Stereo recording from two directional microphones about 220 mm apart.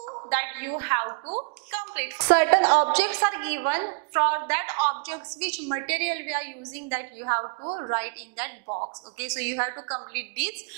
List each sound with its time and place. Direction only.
0.3 s a woman's voice: 15° right (ahead or behind)
7.4 s a woman's voice: 25° right (ahead or behind)
7.9 s a woman's voice: 15° right (ahead or behind)